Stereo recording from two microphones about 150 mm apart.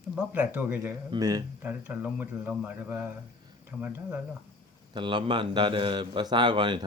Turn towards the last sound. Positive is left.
turn(degrees=-30)  # may be behind; listen again after turning